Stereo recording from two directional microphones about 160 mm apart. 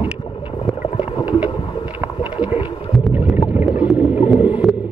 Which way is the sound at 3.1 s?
10° right (ahead or behind).